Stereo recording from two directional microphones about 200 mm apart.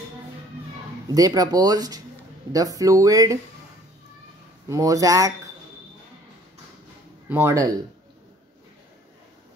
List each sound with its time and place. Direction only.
1.0 s speech: 20° right (ahead or behind)
4.6 s speech: 15° right (ahead or behind)
7.2 s speech: 15° right (ahead or behind)